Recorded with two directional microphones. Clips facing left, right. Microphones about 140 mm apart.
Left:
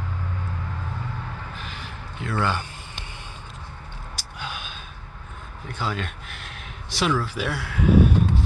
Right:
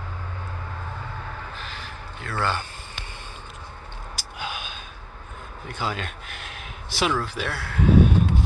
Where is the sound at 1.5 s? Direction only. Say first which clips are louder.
Even; 15° left (ahead or behind).